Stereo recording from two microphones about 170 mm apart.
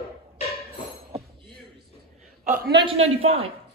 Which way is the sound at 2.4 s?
55° right (ahead or behind).